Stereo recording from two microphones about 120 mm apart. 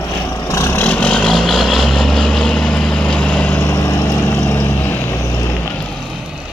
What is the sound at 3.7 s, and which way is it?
Vehicle, 25° left (ahead or behind).